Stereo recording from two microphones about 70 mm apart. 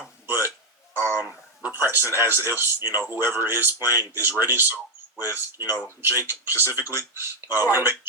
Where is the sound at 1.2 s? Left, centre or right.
Right.